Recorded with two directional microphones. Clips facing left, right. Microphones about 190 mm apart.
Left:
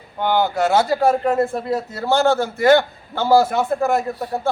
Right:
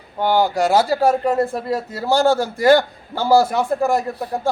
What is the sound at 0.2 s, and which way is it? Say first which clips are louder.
A man's voice: right 1 dB; 10° right (ahead or behind).